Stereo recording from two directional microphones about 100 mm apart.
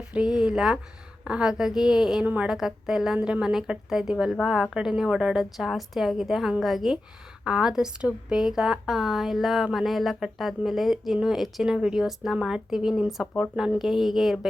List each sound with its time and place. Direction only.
0.1 s a woman's voice: 10° right (ahead or behind)
2.5 s a woman's voice: 5° right (ahead or behind)
3.2 s a woman's voice: 15° right (ahead or behind)
3.4 s a woman's voice: 5° right (ahead or behind)